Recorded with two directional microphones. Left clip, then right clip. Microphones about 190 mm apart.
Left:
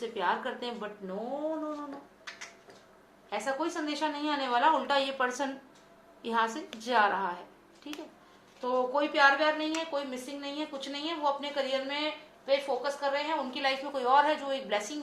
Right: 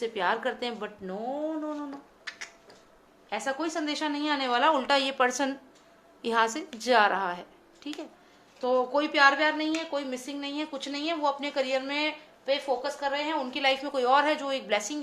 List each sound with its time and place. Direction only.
0.0 s a woman's voice: 55° right (ahead or behind)
3.2 s a woman's voice: 50° right (ahead or behind)